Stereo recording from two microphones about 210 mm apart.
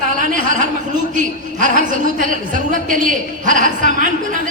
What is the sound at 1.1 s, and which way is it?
A woman's voice, 40° right (ahead or behind).